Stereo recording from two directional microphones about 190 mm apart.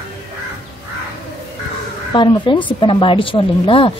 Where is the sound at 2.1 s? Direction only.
25° left (ahead or behind).